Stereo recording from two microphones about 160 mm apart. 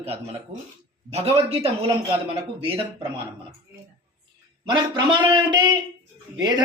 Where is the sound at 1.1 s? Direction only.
40° right (ahead or behind).